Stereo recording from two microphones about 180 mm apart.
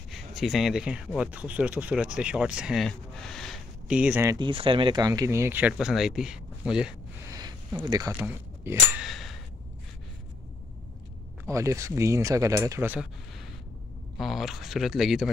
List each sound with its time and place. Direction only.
0.1 s speech: centre (ahead or behind)
7.2 s speech: 20° right (ahead or behind)
9.0 s a sound: centre (ahead or behind)
11.4 s speech: 15° right (ahead or behind)
14.1 s speech: centre (ahead or behind)